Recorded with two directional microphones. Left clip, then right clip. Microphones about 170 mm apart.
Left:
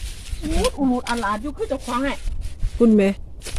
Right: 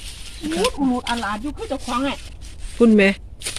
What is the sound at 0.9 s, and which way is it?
Speech, 35° left (ahead or behind).